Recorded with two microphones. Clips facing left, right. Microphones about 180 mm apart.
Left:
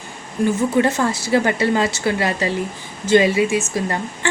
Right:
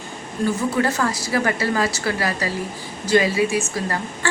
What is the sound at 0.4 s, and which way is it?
Speech, 25° left (ahead or behind).